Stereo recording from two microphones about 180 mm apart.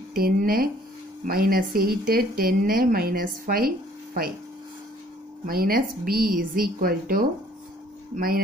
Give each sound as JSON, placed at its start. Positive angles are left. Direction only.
{"t": 0.1, "sound": "speech", "side_deg": -55}
{"t": 5.5, "sound": "a woman's voice", "side_deg": -55}